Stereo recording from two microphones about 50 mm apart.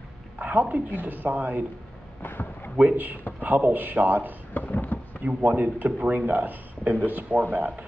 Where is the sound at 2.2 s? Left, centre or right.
Left.